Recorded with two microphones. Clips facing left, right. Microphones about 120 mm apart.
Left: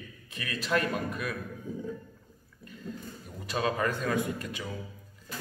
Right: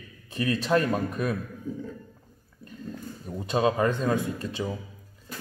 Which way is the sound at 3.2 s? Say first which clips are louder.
Right 6 dB; 25° right (ahead or behind).